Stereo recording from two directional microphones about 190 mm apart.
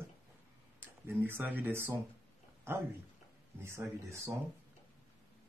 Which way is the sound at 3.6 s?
15° right (ahead or behind).